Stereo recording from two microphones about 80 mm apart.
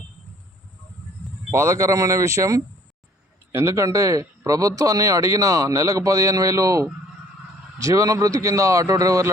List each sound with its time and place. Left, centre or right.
1.5 s a man's voice: right